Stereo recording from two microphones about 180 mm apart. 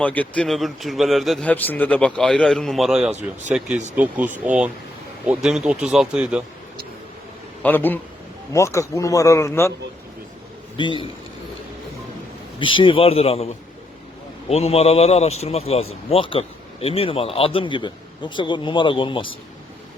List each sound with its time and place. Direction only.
0.0 s a man's voice: 10° left (ahead or behind)
7.6 s speech: 10° left (ahead or behind)
10.8 s a man's voice: 25° left (ahead or behind)
12.5 s speech: 25° left (ahead or behind)
14.5 s speech: 35° left (ahead or behind)